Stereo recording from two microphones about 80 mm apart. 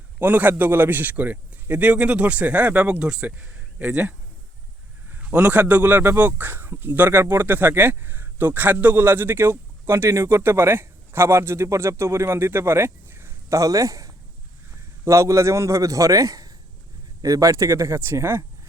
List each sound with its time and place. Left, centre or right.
0.2 s a man's voice: right
5.1 s a man's voice: centre